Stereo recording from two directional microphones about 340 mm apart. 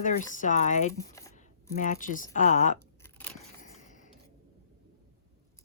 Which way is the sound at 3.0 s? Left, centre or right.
Centre.